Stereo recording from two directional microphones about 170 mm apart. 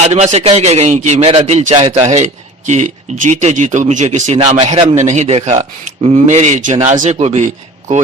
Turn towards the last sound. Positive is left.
turn(degrees=-45)  # may be behind; listen again after turning